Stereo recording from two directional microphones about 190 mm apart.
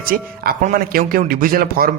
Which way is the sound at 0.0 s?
50° right (ahead or behind).